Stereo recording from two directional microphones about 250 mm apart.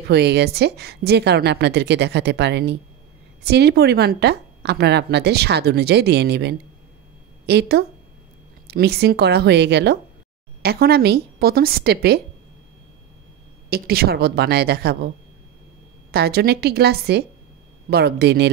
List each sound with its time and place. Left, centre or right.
0.1 s a woman's voice: right
13.7 s a woman's voice: right
16.1 s a woman's voice: right